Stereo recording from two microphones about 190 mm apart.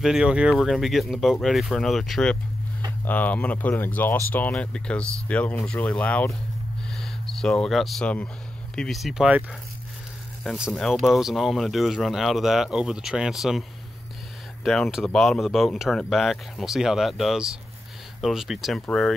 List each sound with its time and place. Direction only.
0.0 s speech: 5° right (ahead or behind)
6.9 s a sound: 5° left (ahead or behind)
8.7 s speech: centre (ahead or behind)